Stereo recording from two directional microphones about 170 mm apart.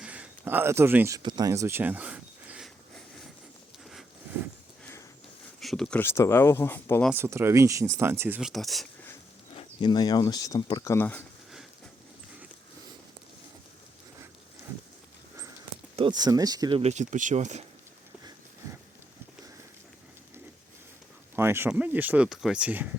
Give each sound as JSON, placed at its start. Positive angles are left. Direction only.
{"t": 0.0, "sound": "speech", "side_deg": -10}
{"t": 1.2, "sound": "speech", "side_deg": -25}
{"t": 5.5, "sound": "speech", "side_deg": 0}
{"t": 7.1, "sound": "speech", "side_deg": -15}
{"t": 9.5, "sound": "speech", "side_deg": 30}
{"t": 10.9, "sound": "speech", "side_deg": 10}
{"t": 16.0, "sound": "speech", "side_deg": -25}
{"t": 21.3, "sound": "speech", "side_deg": -15}